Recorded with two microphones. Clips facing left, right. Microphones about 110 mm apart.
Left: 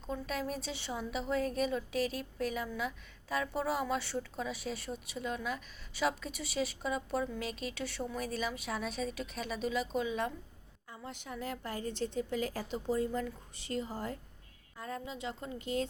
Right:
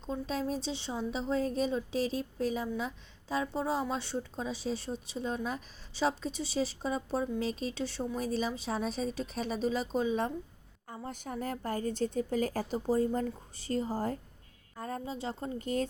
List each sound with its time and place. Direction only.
0.1 s a woman's voice: 30° right (ahead or behind); by 15.9 s 45° right (ahead or behind)